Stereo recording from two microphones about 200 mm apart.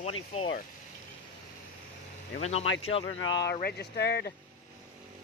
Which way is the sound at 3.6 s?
55° left (ahead or behind).